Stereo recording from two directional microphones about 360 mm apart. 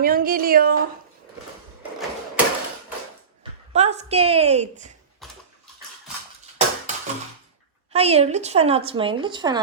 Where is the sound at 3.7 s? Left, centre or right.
Centre.